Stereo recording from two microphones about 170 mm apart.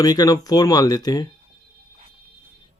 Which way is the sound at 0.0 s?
20° left (ahead or behind).